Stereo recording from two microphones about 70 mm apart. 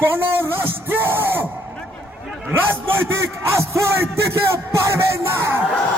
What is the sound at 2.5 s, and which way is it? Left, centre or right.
A man's voice, right.